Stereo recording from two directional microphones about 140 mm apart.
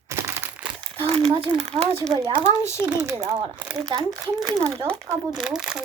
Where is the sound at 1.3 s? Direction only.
35° right (ahead or behind).